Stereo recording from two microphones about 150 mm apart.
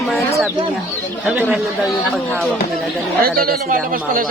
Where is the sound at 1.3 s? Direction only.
5° right (ahead or behind).